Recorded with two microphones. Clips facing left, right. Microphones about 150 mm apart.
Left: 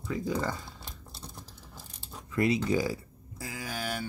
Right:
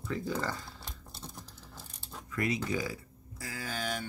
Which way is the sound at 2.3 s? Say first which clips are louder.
Left 6 dB; 30° left (ahead or behind).